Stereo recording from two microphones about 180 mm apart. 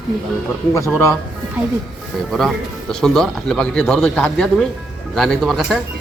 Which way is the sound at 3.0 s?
Centre (ahead or behind).